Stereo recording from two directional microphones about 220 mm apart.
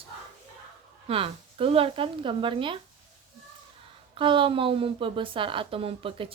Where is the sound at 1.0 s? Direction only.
25° right (ahead or behind).